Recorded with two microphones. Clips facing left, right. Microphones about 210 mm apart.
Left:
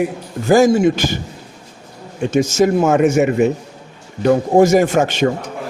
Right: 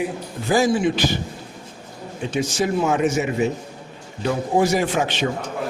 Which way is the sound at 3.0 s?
60° left (ahead or behind).